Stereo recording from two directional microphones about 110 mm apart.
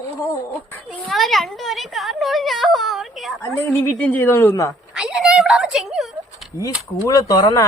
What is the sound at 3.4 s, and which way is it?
Speech, 20° left (ahead or behind).